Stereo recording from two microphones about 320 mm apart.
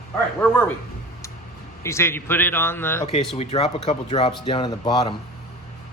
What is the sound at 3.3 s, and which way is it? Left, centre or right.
A man's voice, centre.